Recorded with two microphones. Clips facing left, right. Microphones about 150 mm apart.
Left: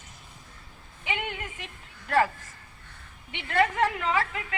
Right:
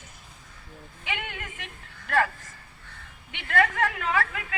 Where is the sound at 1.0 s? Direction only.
30° left (ahead or behind).